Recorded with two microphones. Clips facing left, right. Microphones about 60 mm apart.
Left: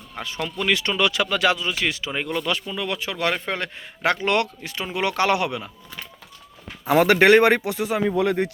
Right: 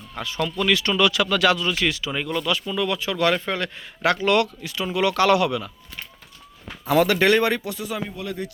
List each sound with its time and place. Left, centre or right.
0.2 s speech: left
6.8 s speech: left